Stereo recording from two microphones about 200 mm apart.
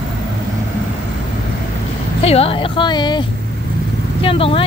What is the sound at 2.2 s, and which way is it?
Speech, 30° left (ahead or behind).